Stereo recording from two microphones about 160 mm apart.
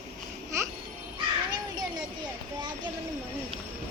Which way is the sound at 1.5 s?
25° right (ahead or behind).